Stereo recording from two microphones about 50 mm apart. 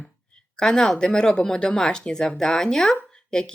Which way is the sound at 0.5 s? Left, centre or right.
Centre.